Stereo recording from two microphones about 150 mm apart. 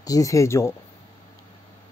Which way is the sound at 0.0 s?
25° left (ahead or behind).